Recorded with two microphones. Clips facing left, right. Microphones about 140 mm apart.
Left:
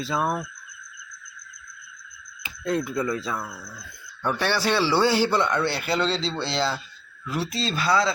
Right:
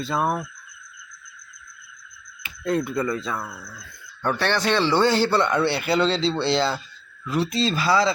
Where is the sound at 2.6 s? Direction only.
Centre (ahead or behind).